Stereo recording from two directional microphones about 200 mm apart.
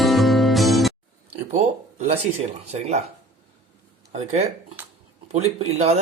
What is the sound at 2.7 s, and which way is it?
Speech, 35° right (ahead or behind).